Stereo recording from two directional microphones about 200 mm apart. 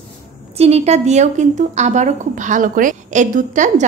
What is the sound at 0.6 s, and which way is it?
A woman's voice, 30° right (ahead or behind).